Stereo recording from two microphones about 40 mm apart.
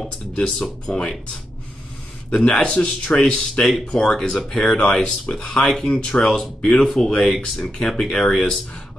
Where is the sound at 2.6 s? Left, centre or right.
Left.